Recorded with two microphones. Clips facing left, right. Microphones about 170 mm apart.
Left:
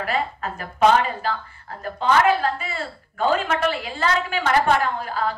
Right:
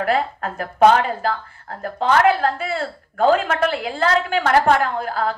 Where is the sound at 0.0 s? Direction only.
60° right (ahead or behind).